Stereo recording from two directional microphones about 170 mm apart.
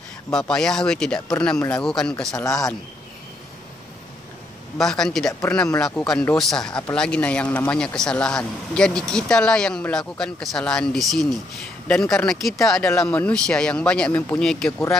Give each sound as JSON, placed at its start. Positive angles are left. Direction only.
{"t": 0.3, "sound": "a man's voice", "side_deg": 5}
{"t": 2.4, "sound": "speech", "side_deg": 20}
{"t": 4.7, "sound": "a man's voice", "side_deg": 0}